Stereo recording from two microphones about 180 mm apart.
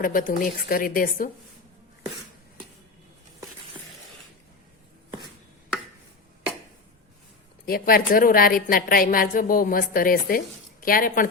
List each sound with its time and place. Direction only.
0.0 s a woman's voice: 50° left (ahead or behind)
7.6 s a woman's voice: 55° left (ahead or behind)